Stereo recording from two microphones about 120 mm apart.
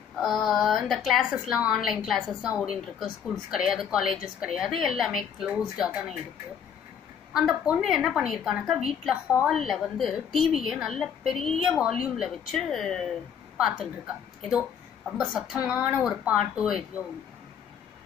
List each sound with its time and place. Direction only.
0.2 s a woman's voice: centre (ahead or behind)
7.3 s a woman's voice: 5° right (ahead or behind)
15.0 s a woman's voice: centre (ahead or behind)